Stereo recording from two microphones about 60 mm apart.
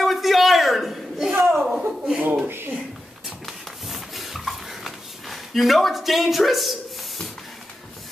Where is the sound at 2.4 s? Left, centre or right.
Right.